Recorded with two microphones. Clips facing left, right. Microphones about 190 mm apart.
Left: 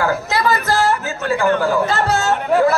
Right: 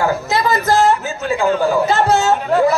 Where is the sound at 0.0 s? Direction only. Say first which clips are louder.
Right 1 dB; 20° right (ahead or behind).